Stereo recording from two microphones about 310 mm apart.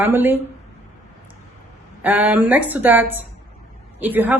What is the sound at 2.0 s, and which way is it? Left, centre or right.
A woman's voice, centre.